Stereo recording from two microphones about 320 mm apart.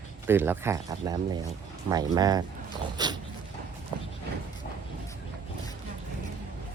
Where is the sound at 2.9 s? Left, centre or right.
Centre.